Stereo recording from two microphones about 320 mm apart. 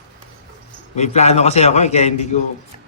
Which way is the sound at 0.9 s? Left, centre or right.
Left.